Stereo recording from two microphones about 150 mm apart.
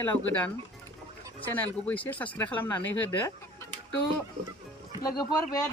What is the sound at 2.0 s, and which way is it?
Speech, 10° left (ahead or behind).